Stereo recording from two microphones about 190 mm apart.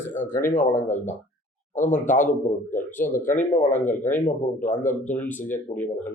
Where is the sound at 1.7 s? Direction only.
40° left (ahead or behind).